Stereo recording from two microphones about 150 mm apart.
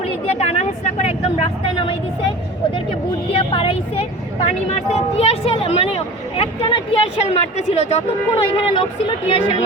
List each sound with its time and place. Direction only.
0.0 s a woman's voice: 40° left (ahead or behind)
3.3 s speech: 35° left (ahead or behind)
8.5 s speech: 35° left (ahead or behind)